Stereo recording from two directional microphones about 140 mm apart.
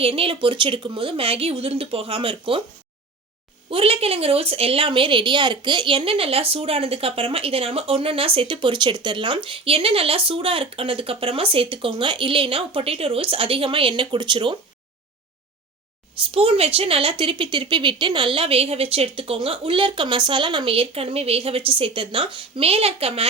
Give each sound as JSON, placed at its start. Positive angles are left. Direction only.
{"t": 0.0, "sound": "a woman's voice", "side_deg": -40}
{"t": 3.7, "sound": "a woman's voice", "side_deg": -40}
{"t": 16.3, "sound": "a woman's voice", "side_deg": -45}